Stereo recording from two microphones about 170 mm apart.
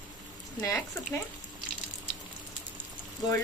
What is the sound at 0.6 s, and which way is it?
Speech, 20° left (ahead or behind).